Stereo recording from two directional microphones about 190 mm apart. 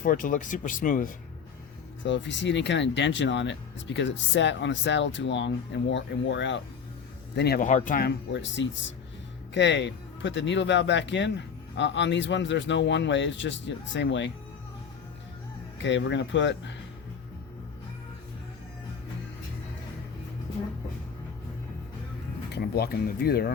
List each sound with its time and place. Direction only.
0.0 s speech: 45° left (ahead or behind)
2.0 s speech: 70° left (ahead or behind)
7.3 s speech: 60° left (ahead or behind)
7.6 s speech: 40° left (ahead or behind)
8.3 s speech: 70° left (ahead or behind)
15.8 s speech: 70° left (ahead or behind)
22.5 s speech: 55° left (ahead or behind)